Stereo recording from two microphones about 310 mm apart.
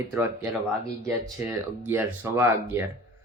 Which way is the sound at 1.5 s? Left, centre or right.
Centre.